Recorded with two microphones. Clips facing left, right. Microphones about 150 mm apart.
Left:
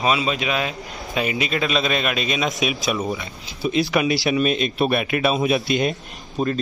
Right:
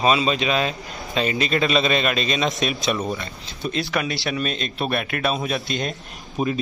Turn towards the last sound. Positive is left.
turn(degrees=-10)  # may be behind; listen again after turning